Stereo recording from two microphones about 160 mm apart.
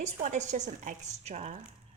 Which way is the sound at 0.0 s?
50° right (ahead or behind).